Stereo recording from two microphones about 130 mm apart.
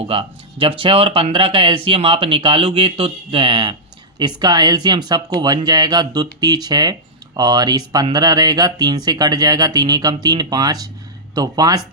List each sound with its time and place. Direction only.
0.0 s speech: 45° right (ahead or behind)